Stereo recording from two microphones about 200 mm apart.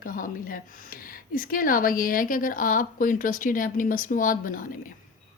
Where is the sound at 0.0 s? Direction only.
45° left (ahead or behind).